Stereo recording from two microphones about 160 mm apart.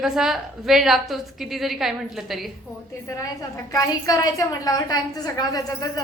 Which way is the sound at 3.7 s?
20° left (ahead or behind).